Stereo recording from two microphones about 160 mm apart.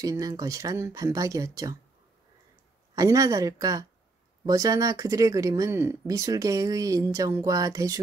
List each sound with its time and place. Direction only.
0.0 s speech: 20° right (ahead or behind)
3.0 s speech: 20° right (ahead or behind)